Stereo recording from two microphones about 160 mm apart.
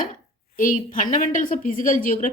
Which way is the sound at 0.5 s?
55° left (ahead or behind).